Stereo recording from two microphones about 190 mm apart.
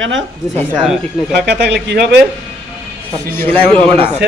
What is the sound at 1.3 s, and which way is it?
Speech, 60° right (ahead or behind).